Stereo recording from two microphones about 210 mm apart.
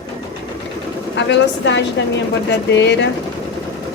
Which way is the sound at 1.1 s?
55° left (ahead or behind).